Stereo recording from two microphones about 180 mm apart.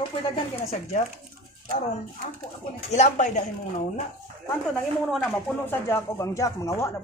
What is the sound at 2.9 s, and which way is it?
Speech, 40° left (ahead or behind).